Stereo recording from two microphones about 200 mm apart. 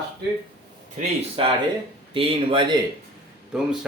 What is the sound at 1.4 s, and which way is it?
Speech, 25° right (ahead or behind).